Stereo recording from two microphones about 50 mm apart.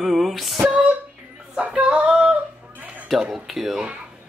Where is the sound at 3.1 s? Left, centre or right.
Centre.